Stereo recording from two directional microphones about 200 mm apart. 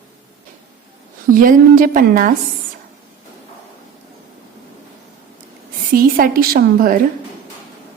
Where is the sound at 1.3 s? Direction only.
45° right (ahead or behind).